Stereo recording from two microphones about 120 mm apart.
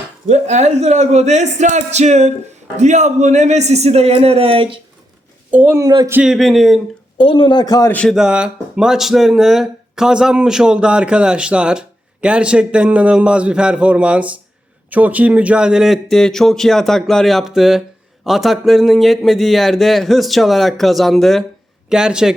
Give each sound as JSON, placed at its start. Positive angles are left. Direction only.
{"t": 0.3, "sound": "speech", "side_deg": -75}
{"t": 2.7, "sound": "a man's voice", "side_deg": -80}
{"t": 5.5, "sound": "speech", "side_deg": -10}
{"t": 6.2, "sound": "speech", "side_deg": 0}
{"t": 7.2, "sound": "speech", "side_deg": 45}
{"t": 7.9, "sound": "a man's voice", "side_deg": 10}
{"t": 8.1, "sound": "speech", "side_deg": -5}